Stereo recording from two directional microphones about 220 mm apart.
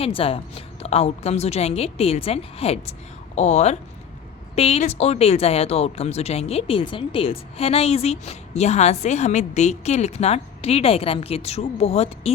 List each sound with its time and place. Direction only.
0.0 s speech: 25° left (ahead or behind)